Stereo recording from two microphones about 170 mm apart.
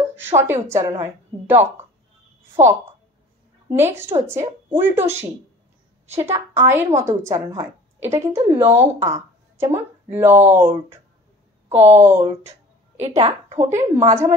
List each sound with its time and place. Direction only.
0.1 s a woman's voice: 10° right (ahead or behind)
11.7 s a woman's voice: 15° right (ahead or behind)
13.3 s a woman's voice: 40° right (ahead or behind)
13.7 s a woman's voice: 15° right (ahead or behind)